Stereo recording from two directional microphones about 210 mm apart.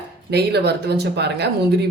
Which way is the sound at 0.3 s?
50° right (ahead or behind).